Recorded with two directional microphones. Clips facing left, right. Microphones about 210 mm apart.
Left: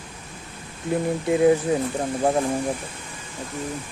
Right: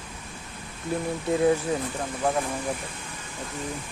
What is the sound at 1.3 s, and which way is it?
Speech, 15° left (ahead or behind).